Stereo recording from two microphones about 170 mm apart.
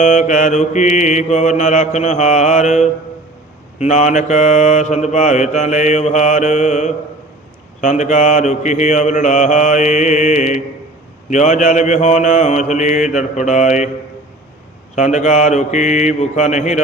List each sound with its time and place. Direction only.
0.0 s mantra: 45° left (ahead or behind)
14.9 s mantra: 45° left (ahead or behind)